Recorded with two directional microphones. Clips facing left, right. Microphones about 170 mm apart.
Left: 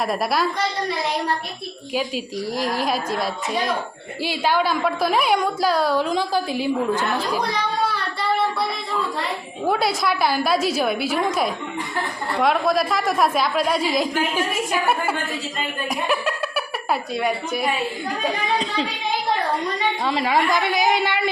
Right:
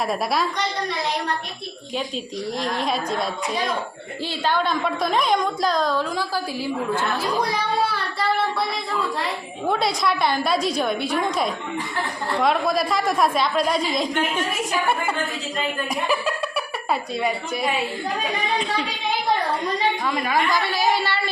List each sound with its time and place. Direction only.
0.1 s a woman's voice: centre (ahead or behind)
2.0 s a woman's voice: 5° left (ahead or behind)
9.6 s a woman's voice: 5° left (ahead or behind)
15.9 s speech: centre (ahead or behind)
20.1 s a woman's voice: 25° left (ahead or behind)